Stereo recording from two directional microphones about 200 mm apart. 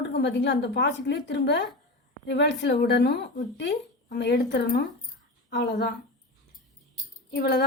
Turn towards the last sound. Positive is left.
turn(degrees=55)  # may be behind; listen again after turning